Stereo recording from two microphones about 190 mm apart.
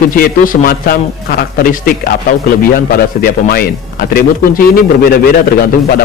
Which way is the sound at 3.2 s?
50° left (ahead or behind).